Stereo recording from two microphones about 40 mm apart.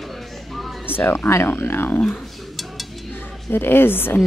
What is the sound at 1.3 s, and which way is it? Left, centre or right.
Speech, left.